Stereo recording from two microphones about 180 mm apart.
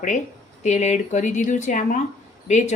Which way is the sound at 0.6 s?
40° left (ahead or behind).